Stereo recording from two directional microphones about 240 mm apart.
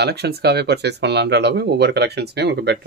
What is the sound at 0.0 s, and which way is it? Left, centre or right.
Speech, right.